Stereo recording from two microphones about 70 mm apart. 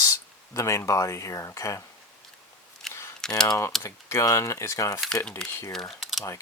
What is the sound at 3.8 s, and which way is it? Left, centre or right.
Speech, left.